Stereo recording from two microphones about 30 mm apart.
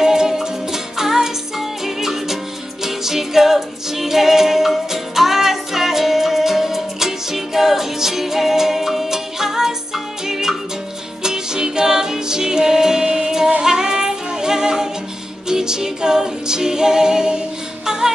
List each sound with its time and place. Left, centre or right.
0.0 s music: centre